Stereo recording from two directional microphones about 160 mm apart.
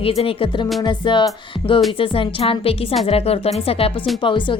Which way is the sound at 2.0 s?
35° left (ahead or behind).